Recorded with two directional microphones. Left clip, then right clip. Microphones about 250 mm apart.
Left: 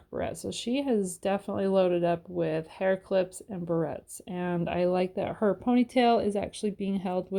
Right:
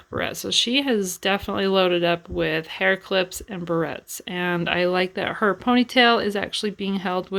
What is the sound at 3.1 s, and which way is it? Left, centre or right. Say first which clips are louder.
Speech: right 4 dB; centre.